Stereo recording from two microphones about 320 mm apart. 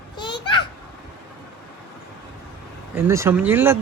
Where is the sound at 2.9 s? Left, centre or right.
Centre.